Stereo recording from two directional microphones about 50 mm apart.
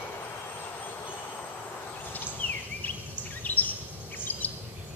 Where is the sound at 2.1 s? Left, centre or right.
Left.